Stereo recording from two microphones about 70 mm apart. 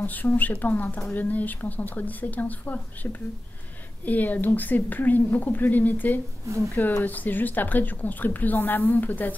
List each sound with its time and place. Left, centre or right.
0.0 s speech: left